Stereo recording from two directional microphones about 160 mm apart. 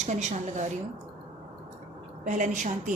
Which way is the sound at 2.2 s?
50° right (ahead or behind).